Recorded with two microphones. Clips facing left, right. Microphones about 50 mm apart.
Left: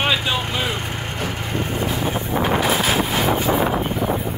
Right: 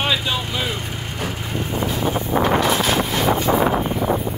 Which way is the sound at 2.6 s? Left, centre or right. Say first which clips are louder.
Even; centre.